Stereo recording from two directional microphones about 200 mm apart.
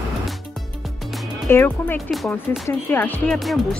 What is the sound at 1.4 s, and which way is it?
Speech, 10° left (ahead or behind).